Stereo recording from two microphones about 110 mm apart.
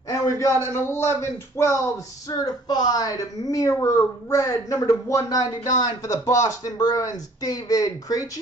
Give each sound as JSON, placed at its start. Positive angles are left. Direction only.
{"t": 0.1, "sound": "a man's voice", "side_deg": 30}
{"t": 2.2, "sound": "a woman's voice", "side_deg": 35}